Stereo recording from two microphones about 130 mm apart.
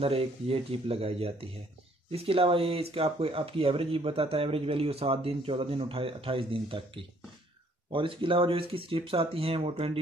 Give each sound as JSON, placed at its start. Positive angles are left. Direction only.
{"t": 0.0, "sound": "speech", "side_deg": -50}
{"t": 7.9, "sound": "speech", "side_deg": -40}